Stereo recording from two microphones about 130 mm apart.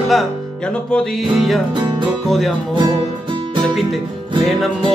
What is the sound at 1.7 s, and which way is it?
Music, 35° right (ahead or behind).